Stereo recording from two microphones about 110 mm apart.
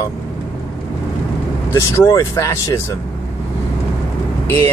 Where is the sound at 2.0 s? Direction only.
25° left (ahead or behind).